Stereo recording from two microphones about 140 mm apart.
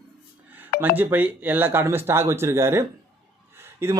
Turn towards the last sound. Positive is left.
turn(degrees=-20)  # may be behind; listen again after turning